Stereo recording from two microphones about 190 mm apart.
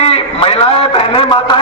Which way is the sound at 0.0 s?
30° left (ahead or behind).